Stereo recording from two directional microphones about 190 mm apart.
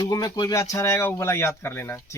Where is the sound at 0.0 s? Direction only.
20° left (ahead or behind).